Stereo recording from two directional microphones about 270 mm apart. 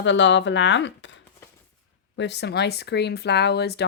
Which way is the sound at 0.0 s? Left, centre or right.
Left.